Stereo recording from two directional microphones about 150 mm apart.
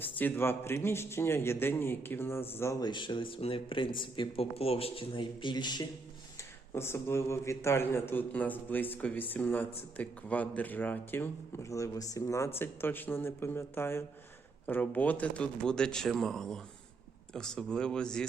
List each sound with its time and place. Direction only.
0.0 s a man's voice: 10° left (ahead or behind)
2.8 s speech: 30° left (ahead or behind)
6.7 s a man's voice: 15° left (ahead or behind)